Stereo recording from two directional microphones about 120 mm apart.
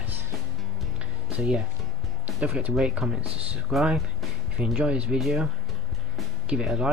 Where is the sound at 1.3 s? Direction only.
10° right (ahead or behind).